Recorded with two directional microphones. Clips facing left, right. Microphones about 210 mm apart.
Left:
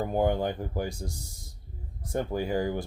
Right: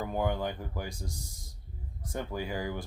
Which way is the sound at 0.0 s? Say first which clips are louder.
Left 5 dB; 40° left (ahead or behind).